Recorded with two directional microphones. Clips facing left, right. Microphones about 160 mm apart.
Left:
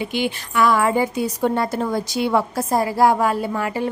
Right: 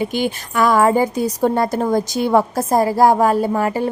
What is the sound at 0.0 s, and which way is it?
A woman's voice, 45° right (ahead or behind).